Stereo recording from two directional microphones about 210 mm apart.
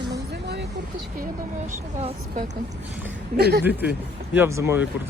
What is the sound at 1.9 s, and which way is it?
Speech, 30° right (ahead or behind).